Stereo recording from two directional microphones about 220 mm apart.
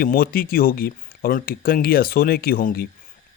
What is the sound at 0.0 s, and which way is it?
Speech, 40° left (ahead or behind).